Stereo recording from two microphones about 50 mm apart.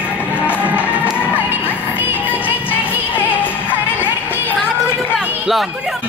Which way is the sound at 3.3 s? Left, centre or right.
Left.